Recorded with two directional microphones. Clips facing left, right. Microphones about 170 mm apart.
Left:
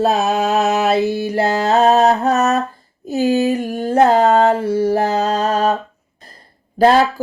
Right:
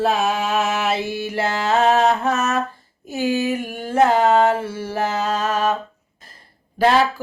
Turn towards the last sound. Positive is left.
turn(degrees=40)  # may be behind; listen again after turning